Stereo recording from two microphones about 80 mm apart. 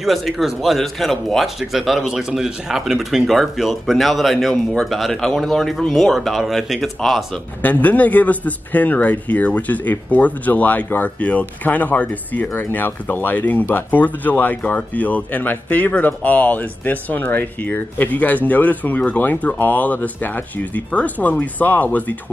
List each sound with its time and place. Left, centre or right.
0.0 s speech: centre
7.6 s speech: left